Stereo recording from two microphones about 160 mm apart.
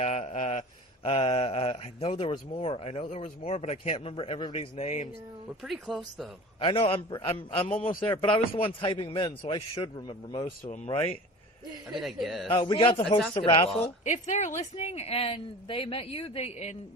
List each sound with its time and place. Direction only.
0.0 s mantra: 40° left (ahead or behind)
1.0 s speech: 35° left (ahead or behind)
5.6 s speech: centre (ahead or behind)
6.6 s speech: 35° left (ahead or behind)
11.9 s speech: centre (ahead or behind)
12.5 s speech: 35° left (ahead or behind)
13.7 s a woman's voice: 10° left (ahead or behind)
14.0 s speech: 45° left (ahead or behind)